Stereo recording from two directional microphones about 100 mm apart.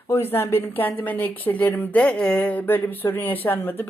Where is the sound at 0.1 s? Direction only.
20° left (ahead or behind).